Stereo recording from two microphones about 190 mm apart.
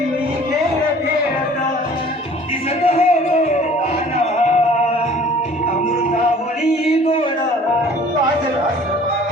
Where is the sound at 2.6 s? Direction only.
35° left (ahead or behind).